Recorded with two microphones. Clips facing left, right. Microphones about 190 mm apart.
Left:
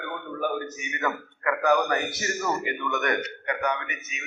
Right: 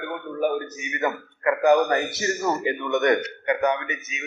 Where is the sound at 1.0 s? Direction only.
30° right (ahead or behind).